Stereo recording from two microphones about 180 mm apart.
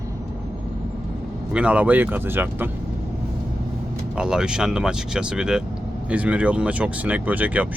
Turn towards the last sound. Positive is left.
turn(degrees=-10)  # may be behind; listen again after turning